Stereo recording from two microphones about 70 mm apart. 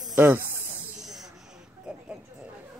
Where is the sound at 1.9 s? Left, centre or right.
Centre.